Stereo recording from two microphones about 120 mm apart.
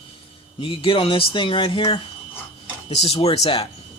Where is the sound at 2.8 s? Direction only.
55° left (ahead or behind).